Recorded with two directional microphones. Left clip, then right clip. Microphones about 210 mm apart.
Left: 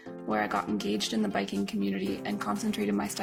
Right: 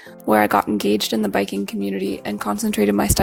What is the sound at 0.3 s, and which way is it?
Speech, 45° right (ahead or behind).